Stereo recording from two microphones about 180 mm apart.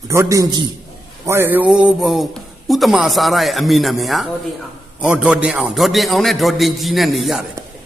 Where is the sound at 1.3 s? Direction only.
10° right (ahead or behind).